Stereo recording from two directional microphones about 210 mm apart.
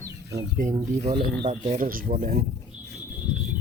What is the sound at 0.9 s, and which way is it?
Speech, 35° right (ahead or behind).